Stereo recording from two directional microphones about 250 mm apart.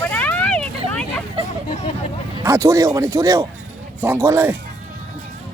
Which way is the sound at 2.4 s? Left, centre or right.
Centre.